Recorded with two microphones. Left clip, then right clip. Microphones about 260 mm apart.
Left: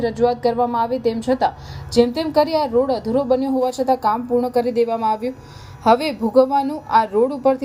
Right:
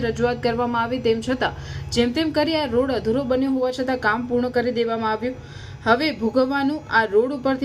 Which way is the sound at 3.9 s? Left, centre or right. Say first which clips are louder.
Left 4 dB; left.